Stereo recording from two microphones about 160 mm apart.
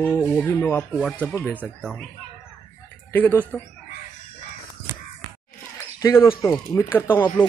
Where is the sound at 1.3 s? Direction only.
15° left (ahead or behind).